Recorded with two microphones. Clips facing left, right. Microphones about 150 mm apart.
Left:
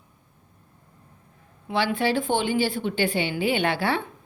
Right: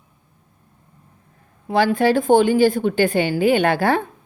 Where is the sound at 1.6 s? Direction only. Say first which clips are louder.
Right 7 dB; 40° right (ahead or behind).